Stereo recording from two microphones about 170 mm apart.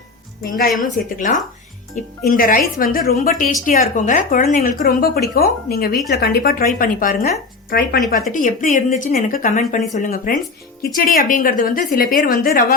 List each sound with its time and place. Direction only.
0.4 s a woman's voice: 55° left (ahead or behind)
8.3 s a woman's voice: 50° left (ahead or behind)